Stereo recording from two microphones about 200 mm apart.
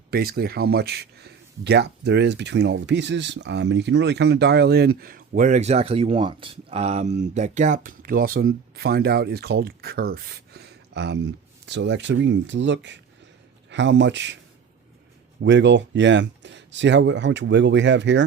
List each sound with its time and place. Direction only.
0.1 s speech: 50° right (ahead or behind)
15.4 s speech: 60° right (ahead or behind)